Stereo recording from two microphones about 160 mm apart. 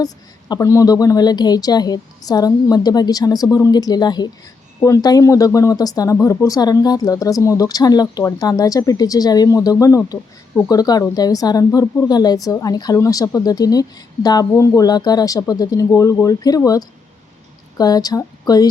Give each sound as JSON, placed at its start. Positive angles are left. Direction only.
{"t": 0.0, "sound": "speech", "side_deg": 25}